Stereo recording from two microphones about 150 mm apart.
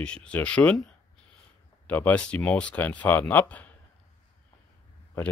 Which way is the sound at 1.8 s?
10° left (ahead or behind).